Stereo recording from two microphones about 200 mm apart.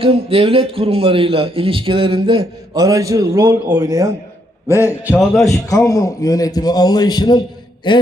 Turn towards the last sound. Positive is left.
turn(degrees=20)  # may be behind; listen again after turning